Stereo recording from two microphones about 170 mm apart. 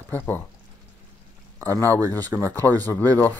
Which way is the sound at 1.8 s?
20° right (ahead or behind).